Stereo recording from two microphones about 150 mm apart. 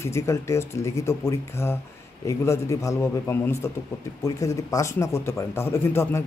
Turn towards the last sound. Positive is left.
turn(degrees=15)  # may be behind; listen again after turning